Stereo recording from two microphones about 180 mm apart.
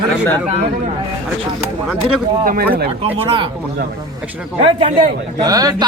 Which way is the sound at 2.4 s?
50° right (ahead or behind).